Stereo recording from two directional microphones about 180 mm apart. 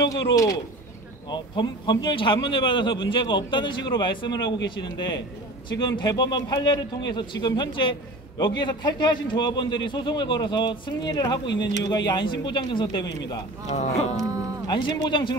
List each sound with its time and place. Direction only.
0.0 s speech: 20° left (ahead or behind)
11.4 s speech: 85° left
12.1 s speech: 25° left (ahead or behind)
13.7 s speech: 40° left (ahead or behind)
14.1 s a sound: 20° right (ahead or behind)
14.7 s speech: 25° left (ahead or behind)